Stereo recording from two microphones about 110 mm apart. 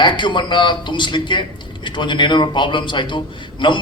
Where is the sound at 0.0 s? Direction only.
45° left (ahead or behind).